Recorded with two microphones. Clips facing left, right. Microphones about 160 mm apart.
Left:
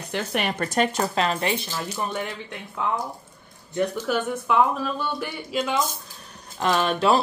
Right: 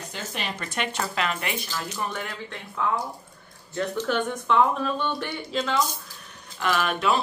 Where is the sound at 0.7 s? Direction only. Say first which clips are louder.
Left 5 dB; 40° left (ahead or behind); by 2.3 s 25° left (ahead or behind).